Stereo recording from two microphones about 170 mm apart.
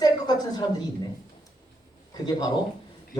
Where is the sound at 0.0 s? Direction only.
25° left (ahead or behind).